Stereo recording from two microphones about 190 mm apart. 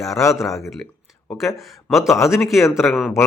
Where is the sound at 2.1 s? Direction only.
15° left (ahead or behind).